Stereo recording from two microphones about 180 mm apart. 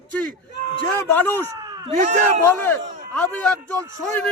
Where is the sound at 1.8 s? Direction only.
40° right (ahead or behind).